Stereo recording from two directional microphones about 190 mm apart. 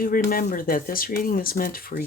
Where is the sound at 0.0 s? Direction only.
50° left (ahead or behind).